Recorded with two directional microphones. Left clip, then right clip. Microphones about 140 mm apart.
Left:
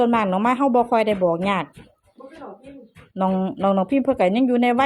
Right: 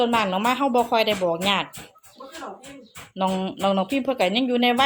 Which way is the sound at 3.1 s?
35° left (ahead or behind).